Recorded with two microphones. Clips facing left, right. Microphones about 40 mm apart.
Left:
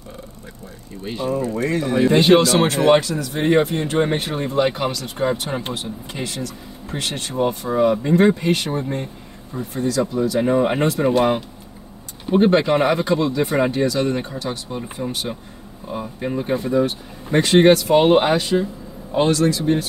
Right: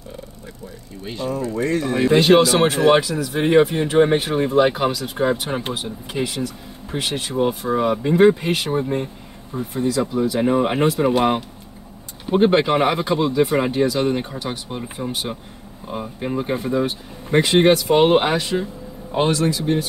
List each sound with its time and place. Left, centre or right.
1.0 s speech: centre
2.3 s speech: centre
4.5 s speech: centre
13.4 s speech: centre